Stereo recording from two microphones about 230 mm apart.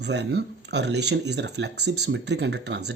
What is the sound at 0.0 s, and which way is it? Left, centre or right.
A man's voice, right.